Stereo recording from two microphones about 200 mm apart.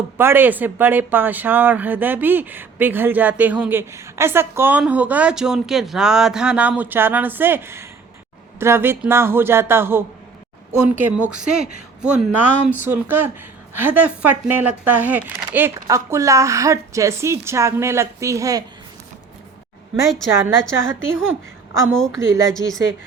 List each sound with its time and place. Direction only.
0.2 s speech: 10° right (ahead or behind)
20.4 s a woman's voice: 15° right (ahead or behind)